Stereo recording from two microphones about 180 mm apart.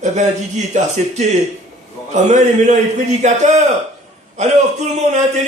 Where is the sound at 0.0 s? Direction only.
40° right (ahead or behind).